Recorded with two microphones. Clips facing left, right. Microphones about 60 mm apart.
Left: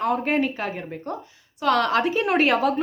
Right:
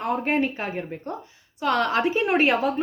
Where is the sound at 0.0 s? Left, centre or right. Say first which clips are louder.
Left 1 dB; centre.